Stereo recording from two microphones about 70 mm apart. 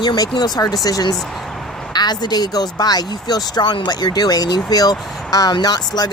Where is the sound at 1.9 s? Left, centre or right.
Left.